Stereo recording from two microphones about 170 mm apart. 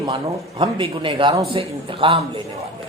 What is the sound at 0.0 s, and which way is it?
A man's voice, 25° right (ahead or behind).